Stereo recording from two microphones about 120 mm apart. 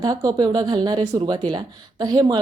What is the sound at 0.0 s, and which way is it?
Speech, 30° right (ahead or behind).